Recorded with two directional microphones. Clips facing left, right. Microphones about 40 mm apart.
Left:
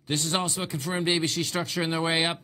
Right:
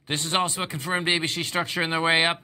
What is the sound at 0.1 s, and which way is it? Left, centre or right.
Speech, right.